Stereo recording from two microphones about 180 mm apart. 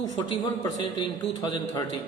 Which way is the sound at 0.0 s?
20° left (ahead or behind).